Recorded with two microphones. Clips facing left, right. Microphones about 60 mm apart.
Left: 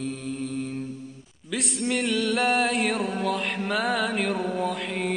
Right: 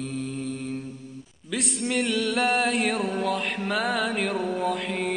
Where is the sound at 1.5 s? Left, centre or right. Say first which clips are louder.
Left 1 dB; centre.